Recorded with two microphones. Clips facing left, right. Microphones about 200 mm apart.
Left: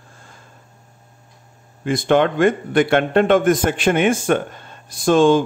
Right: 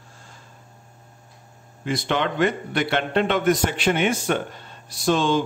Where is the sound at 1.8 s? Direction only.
50° left (ahead or behind).